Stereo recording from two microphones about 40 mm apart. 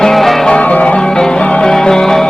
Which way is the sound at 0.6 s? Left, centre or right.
Left.